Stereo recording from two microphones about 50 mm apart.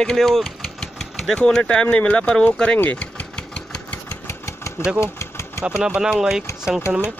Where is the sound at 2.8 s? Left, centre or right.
Left.